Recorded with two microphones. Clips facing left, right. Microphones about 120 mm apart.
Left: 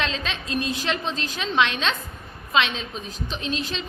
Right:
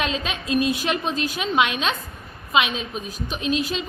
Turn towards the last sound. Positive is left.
turn(degrees=-10)  # may be behind; listen again after turning